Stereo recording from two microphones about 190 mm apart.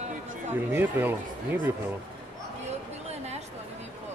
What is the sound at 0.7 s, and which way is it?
Speech, 10° right (ahead or behind).